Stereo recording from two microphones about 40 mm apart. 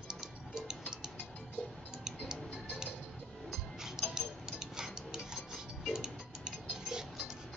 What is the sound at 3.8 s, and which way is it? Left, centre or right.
Tick-tock, centre.